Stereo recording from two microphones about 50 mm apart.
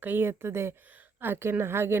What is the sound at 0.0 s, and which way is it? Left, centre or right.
A woman's voice, right.